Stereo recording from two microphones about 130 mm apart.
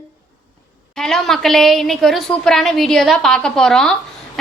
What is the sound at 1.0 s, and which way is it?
A woman's voice, 5° left (ahead or behind).